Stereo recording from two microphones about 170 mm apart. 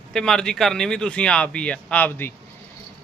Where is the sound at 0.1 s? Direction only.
5° left (ahead or behind).